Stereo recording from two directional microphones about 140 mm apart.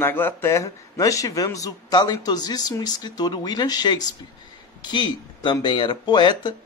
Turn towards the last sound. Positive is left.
turn(degrees=30)  # may be behind; listen again after turning